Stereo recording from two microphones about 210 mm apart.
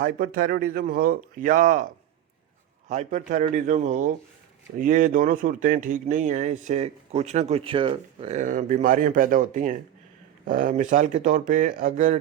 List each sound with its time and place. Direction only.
0.0 s speech: 40° right (ahead or behind)
2.9 s speech: 35° right (ahead or behind)